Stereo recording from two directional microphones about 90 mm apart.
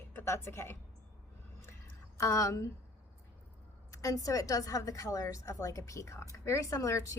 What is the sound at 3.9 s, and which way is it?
A woman's voice, 35° left (ahead or behind).